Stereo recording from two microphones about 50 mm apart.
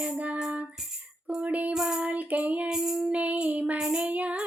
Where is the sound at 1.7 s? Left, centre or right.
Centre.